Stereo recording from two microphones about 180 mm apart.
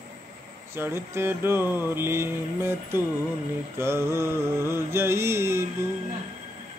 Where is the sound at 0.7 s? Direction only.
10° right (ahead or behind).